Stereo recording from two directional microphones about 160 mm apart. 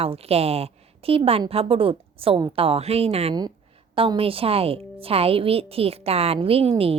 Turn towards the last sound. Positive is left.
turn(degrees=-35)  # may be behind; listen again after turning